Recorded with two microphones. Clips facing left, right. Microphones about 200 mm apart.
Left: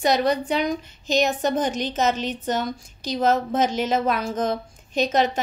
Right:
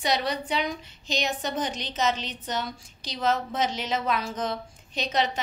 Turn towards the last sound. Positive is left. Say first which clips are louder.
# left 6 dB
turn(degrees=45)  # may be behind; listen again after turning